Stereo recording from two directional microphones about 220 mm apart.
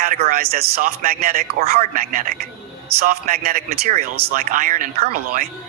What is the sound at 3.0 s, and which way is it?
A man's voice, 40° right (ahead or behind).